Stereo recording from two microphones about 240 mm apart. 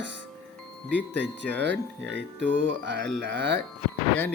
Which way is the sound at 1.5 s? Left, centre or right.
Right.